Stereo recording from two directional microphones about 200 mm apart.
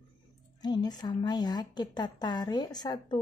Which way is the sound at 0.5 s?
20° left (ahead or behind).